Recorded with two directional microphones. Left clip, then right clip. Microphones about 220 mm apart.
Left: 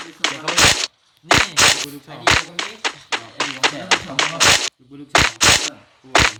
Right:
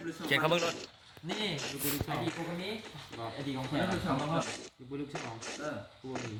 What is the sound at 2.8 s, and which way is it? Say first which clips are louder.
Speech: left 19 dB; 50° left (ahead or behind).